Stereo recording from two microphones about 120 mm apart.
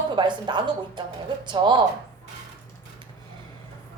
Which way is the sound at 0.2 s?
40° right (ahead or behind).